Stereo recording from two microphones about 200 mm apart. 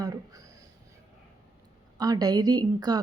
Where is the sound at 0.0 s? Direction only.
15° right (ahead or behind).